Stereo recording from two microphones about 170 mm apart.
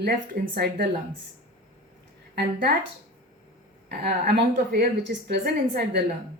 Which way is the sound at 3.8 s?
65° right (ahead or behind).